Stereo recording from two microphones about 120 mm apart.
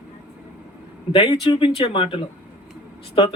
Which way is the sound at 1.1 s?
45° left (ahead or behind).